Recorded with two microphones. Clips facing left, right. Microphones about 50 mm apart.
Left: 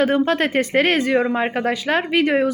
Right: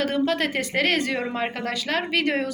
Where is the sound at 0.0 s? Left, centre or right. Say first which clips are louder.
Left 5 dB; left.